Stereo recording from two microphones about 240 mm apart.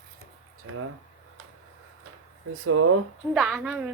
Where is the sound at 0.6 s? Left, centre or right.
Right.